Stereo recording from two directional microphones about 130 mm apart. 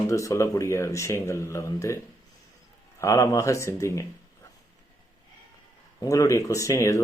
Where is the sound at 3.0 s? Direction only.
25° left (ahead or behind).